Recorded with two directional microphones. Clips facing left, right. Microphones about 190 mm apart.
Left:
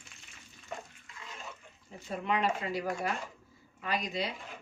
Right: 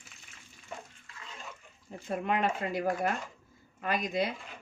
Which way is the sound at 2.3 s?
50° right (ahead or behind).